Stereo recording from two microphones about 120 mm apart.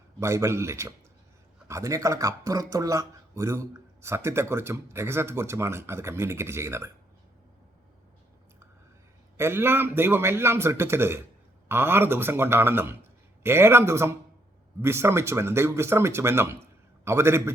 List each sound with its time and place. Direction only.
0.2 s speech: 25° right (ahead or behind)
9.4 s speech: 20° right (ahead or behind)